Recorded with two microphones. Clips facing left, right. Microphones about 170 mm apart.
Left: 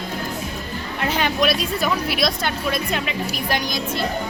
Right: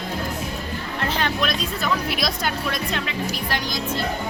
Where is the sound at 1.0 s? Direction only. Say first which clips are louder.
Left 3 dB; 10° left (ahead or behind).